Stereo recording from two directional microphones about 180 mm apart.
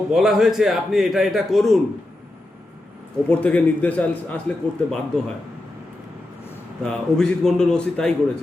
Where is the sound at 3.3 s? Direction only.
10° left (ahead or behind).